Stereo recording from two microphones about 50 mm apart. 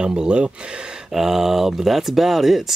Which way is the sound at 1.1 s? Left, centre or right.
Centre.